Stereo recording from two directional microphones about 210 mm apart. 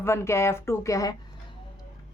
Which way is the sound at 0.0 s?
10° left (ahead or behind).